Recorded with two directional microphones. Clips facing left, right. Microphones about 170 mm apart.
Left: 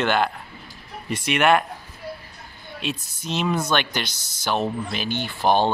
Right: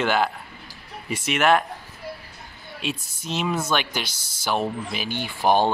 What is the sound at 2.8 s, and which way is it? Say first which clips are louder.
Speech: left 1 dB; 5° right (ahead or behind).